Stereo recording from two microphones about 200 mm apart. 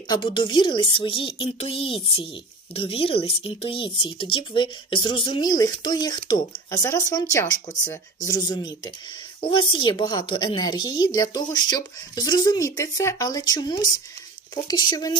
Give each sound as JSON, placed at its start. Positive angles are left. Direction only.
{"t": 0.1, "sound": "a woman's voice", "side_deg": 25}